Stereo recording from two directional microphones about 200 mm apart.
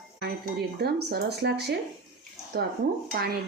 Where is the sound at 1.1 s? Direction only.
55° right (ahead or behind).